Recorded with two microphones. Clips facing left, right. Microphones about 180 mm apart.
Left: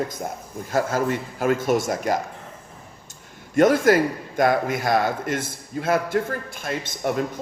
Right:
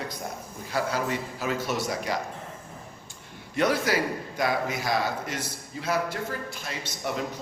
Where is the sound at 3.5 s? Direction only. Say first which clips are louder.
Left 8 dB; 50° left (ahead or behind).